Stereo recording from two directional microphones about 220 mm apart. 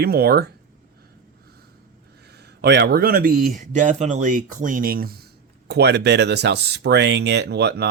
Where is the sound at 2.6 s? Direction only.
50° right (ahead or behind).